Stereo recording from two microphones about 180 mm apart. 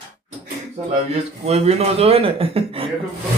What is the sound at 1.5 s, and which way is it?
Speech, 35° right (ahead or behind).